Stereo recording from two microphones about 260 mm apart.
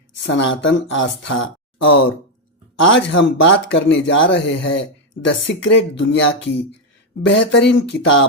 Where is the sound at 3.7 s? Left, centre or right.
Left.